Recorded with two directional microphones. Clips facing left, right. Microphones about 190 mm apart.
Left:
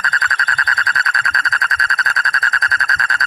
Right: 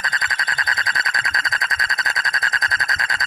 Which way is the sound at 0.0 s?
15° right (ahead or behind).